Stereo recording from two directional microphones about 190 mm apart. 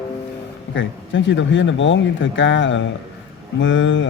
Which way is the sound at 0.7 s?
75° left (ahead or behind).